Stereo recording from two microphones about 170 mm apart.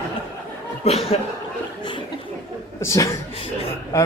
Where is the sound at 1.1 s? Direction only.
35° left (ahead or behind).